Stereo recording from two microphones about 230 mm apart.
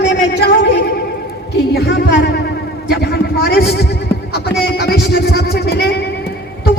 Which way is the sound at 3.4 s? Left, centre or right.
Left.